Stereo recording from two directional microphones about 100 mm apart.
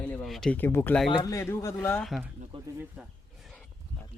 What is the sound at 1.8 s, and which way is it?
Speech, 15° left (ahead or behind).